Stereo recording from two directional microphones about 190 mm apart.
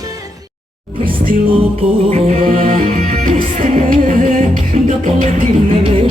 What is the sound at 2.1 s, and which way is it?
Music, 45° right (ahead or behind).